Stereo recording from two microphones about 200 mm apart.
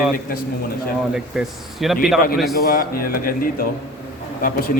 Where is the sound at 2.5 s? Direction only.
45° left (ahead or behind).